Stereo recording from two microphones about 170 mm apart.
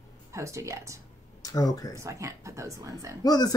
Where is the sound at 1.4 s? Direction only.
20° left (ahead or behind).